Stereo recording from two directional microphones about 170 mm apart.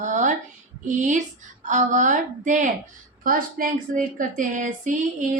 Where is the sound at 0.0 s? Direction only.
45° right (ahead or behind).